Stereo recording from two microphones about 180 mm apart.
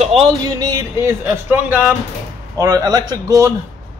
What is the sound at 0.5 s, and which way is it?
Speech, 20° right (ahead or behind).